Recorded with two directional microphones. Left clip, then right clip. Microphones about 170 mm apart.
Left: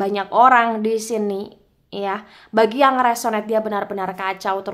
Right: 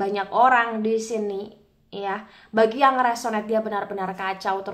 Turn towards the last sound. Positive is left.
turn(degrees=30)  # may be behind; listen again after turning